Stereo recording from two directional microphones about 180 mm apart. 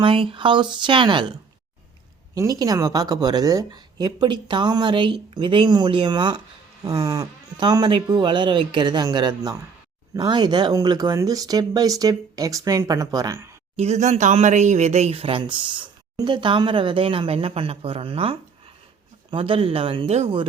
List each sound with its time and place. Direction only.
0.0 s speech: 30° right (ahead or behind)
2.3 s speech: 20° right (ahead or behind)
13.7 s speech: 35° right (ahead or behind)